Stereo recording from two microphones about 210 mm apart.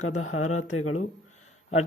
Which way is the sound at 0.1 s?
90° left.